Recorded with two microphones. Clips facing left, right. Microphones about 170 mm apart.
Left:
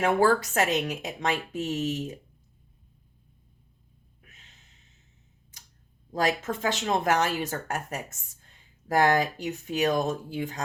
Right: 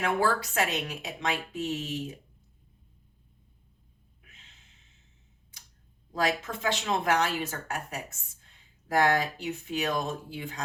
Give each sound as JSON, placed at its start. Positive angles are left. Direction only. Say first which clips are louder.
{"t": 0.0, "sound": "speech", "louder": "left 5 dB", "side_deg": 45}
{"t": 6.1, "sound": "speech", "louder": "left 2 dB", "side_deg": 45}